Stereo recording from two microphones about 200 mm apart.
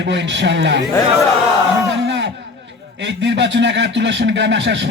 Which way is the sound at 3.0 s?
65° right (ahead or behind).